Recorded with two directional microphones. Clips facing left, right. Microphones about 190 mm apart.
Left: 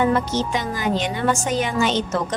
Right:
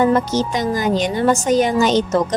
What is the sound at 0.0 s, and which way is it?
A woman's voice, 40° right (ahead or behind).